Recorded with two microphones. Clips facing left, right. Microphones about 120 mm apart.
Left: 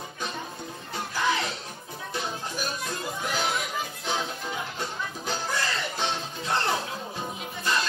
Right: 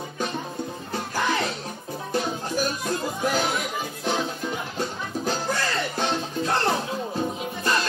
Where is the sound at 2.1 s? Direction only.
60° right (ahead or behind).